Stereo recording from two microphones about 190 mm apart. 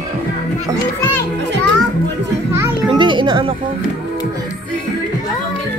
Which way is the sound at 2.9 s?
25° right (ahead or behind).